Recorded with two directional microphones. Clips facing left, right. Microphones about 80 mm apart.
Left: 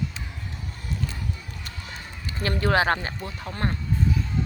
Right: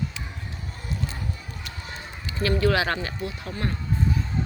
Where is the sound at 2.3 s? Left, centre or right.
Left.